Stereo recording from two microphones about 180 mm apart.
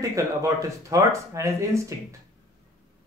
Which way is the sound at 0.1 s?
20° right (ahead or behind).